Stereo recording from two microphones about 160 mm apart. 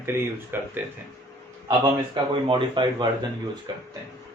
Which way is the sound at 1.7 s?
30° right (ahead or behind).